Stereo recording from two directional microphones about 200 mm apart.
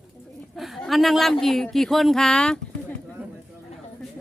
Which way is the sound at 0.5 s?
Centre (ahead or behind).